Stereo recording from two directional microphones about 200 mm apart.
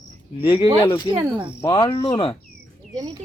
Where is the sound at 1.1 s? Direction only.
25° right (ahead or behind).